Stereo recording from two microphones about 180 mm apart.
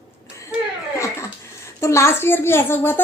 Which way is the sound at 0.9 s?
15° left (ahead or behind).